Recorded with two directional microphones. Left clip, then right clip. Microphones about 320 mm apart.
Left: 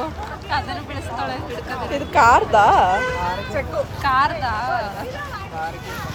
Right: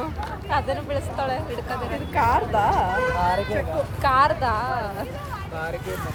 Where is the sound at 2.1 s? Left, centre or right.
Left.